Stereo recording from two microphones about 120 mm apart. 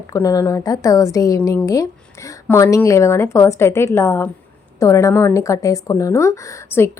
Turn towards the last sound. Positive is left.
turn(degrees=20)  # may be behind; listen again after turning